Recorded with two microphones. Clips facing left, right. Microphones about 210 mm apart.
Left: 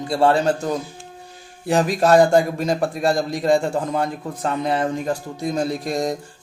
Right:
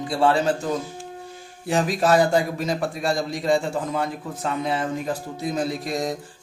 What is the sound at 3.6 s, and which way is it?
Mantra, 50° left (ahead or behind).